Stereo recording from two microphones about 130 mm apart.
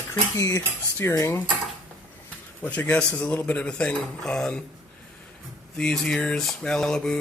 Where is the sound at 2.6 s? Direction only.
10° left (ahead or behind).